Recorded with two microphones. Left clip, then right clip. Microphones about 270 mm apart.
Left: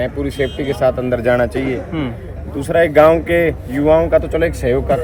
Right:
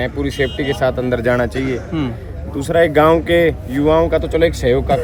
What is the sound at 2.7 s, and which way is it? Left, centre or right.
Speech, centre.